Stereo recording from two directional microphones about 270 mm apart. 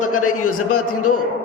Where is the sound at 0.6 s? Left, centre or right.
Left.